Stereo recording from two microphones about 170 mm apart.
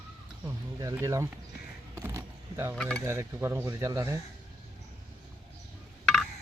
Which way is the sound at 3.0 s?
15° right (ahead or behind).